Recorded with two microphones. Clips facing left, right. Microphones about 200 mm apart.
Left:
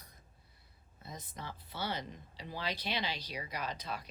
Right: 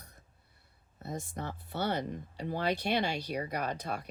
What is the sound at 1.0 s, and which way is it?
Speech, 60° right (ahead or behind).